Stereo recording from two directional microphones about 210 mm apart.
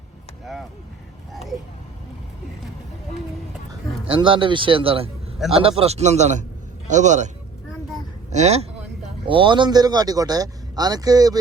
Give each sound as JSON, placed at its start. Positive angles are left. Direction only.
{"t": 4.0, "sound": "a man's voice", "side_deg": -25}
{"t": 8.3, "sound": "speech", "side_deg": -30}